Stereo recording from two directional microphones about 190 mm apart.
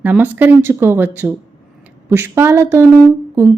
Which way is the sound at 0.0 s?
10° right (ahead or behind).